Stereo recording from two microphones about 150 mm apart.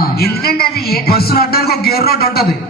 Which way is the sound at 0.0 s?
90° left.